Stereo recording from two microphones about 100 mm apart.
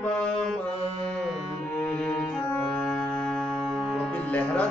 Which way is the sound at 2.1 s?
10° left (ahead or behind).